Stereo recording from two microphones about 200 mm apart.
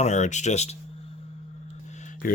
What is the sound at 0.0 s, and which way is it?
Speech, 35° left (ahead or behind).